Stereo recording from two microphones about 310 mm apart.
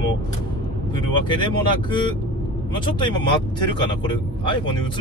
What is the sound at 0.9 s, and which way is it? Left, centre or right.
Speech, centre.